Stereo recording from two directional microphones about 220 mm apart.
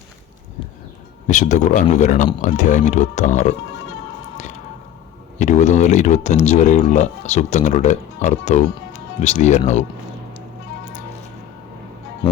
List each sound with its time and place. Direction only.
1.3 s speech: 35° left (ahead or behind)
5.4 s speech: 30° left (ahead or behind)